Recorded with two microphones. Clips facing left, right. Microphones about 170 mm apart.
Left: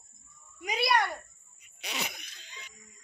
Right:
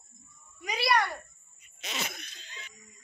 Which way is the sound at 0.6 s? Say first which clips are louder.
Even; 20° left (ahead or behind).